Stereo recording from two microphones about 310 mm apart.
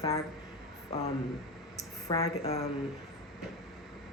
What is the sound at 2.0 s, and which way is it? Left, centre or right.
Speech, centre.